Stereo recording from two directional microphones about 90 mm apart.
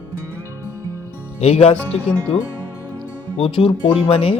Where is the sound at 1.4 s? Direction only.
90° left.